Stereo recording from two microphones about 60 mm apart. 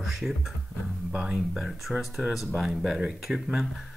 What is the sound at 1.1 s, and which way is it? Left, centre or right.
Speech, centre.